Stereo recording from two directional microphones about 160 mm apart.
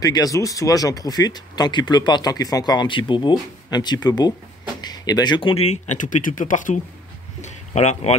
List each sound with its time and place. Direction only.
0.0 s speech: 25° left (ahead or behind)
5.7 s speech: 50° left (ahead or behind)